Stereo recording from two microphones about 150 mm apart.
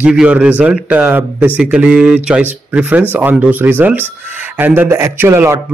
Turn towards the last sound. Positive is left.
turn(degrees=-15)  # may be behind; listen again after turning